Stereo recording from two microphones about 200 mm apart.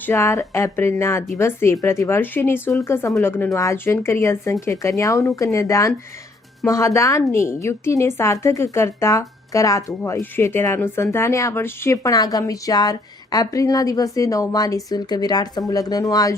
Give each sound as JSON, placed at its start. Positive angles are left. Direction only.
{"t": 0.0, "sound": "a woman's voice", "side_deg": 15}